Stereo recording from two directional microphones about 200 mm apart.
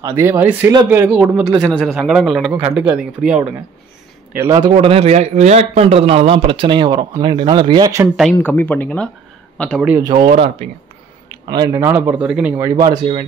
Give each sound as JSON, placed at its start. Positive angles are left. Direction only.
{"t": 0.0, "sound": "a man's voice", "side_deg": -15}
{"t": 4.4, "sound": "a man's voice", "side_deg": -20}
{"t": 8.2, "sound": "a man's voice", "side_deg": 5}
{"t": 9.8, "sound": "a man's voice", "side_deg": -15}
{"t": 11.4, "sound": "speech", "side_deg": -20}